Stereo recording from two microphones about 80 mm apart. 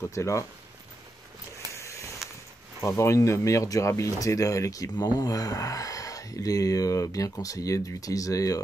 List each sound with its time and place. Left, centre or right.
0.1 s speech: left
1.7 s a sound: left
2.8 s speech: left